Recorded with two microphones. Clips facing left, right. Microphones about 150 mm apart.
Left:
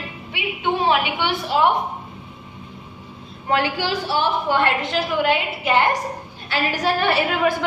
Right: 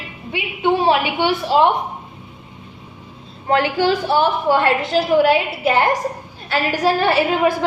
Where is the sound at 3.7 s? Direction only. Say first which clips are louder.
Right 6 dB; 45° right (ahead or behind).